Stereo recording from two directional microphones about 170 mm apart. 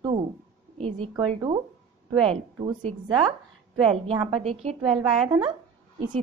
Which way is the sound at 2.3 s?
35° right (ahead or behind).